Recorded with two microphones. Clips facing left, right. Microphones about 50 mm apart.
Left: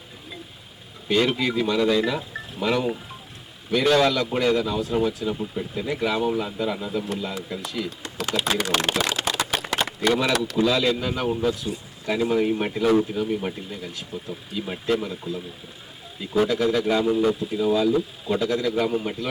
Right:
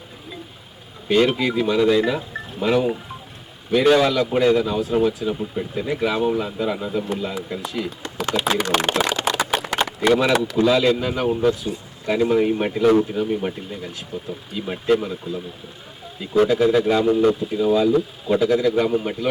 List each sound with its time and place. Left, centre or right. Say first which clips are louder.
1.0 s speech: right 4 dB; centre
2.3 s a sound: right 4 dB; centre
3.8 s speech: right 3 dB; centre
8.0 s speech: right 4 dB; centre
9.3 s a sound: right 4 dB; centre
9.7 s speech: right 4 dB; centre
16.8 s speech: right 4 dB; centre